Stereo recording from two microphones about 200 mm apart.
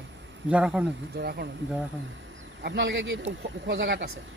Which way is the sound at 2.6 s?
60° right (ahead or behind).